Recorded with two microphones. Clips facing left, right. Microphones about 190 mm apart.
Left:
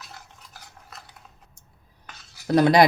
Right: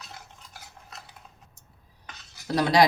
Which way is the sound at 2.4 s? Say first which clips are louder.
Left 4 dB; 50° left (ahead or behind).